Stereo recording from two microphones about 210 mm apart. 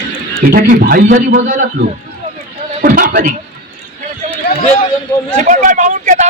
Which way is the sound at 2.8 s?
40° right (ahead or behind).